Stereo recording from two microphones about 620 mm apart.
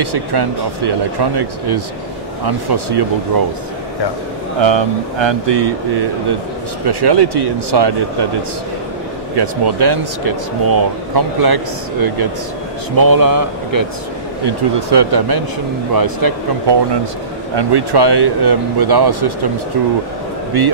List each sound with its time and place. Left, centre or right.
0.0 s speech: right
4.6 s speech: right
9.3 s speech: right
17.6 s speech: right
20.5 s speech: right